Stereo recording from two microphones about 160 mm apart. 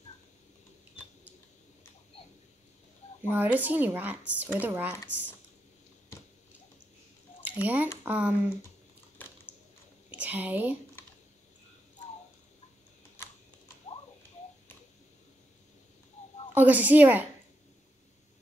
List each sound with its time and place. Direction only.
3.3 s speech: 10° right (ahead or behind)
7.4 s speech: 10° right (ahead or behind)
9.2 s a sound: 10° left (ahead or behind)
10.1 s speech: 10° right (ahead or behind)
16.5 s speech: 10° right (ahead or behind)